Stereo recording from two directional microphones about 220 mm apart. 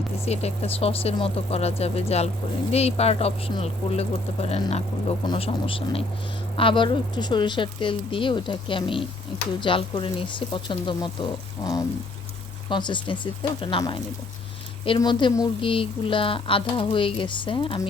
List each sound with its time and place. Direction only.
0.3 s speech: 30° left (ahead or behind)